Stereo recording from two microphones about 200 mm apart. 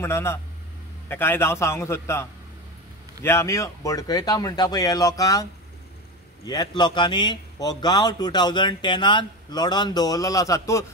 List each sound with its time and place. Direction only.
0.0 s a man's voice: 10° left (ahead or behind)